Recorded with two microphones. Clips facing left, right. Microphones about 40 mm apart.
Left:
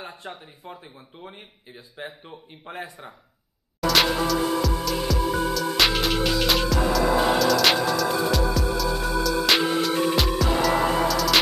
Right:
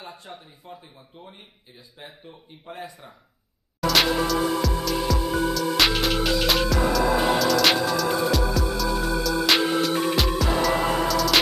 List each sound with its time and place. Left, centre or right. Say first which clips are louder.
0.2 s speech: left 3 dB; left
2.2 s speech: left 1 dB; left
3.8 s music: even; centre